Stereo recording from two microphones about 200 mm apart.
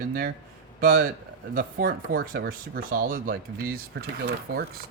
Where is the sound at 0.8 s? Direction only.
55° right (ahead or behind).